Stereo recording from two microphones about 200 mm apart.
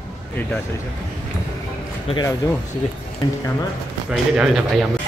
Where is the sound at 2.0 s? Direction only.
20° left (ahead or behind).